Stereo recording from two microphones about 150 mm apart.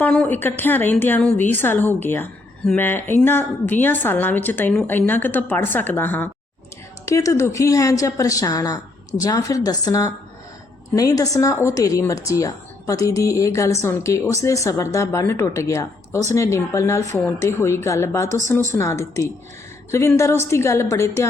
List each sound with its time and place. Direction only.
0.0 s a woman's voice: 10° left (ahead or behind)